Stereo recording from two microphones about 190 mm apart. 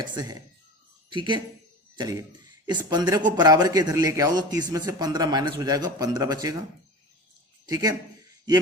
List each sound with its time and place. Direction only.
0.0 s a man's voice: 20° right (ahead or behind)
2.6 s a man's voice: 20° right (ahead or behind)
7.7 s a man's voice: 20° right (ahead or behind)